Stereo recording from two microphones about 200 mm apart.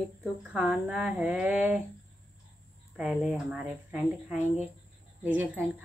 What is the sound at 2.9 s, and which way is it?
Speech, 5° right (ahead or behind).